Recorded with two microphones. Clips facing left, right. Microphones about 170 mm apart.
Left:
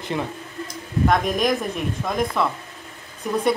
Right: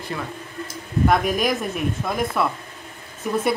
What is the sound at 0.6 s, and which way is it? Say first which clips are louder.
Speech: right 1 dB; 5° right (ahead or behind).